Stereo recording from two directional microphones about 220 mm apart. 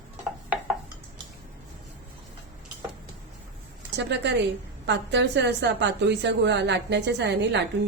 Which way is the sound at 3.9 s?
50° right (ahead or behind).